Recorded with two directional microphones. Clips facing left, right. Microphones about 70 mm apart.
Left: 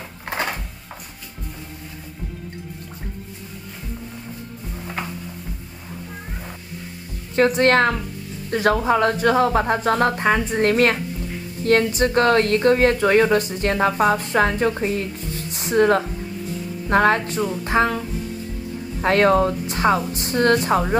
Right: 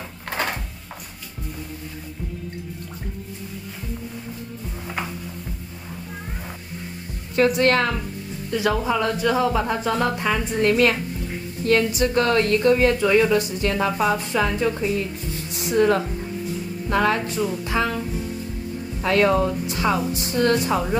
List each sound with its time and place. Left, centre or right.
0.2 s a sound: centre
7.3 s a woman's voice: left
15.5 s music: left
16.9 s a woman's voice: left
19.0 s a woman's voice: left